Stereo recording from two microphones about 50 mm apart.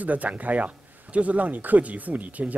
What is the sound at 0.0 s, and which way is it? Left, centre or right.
Speech, right.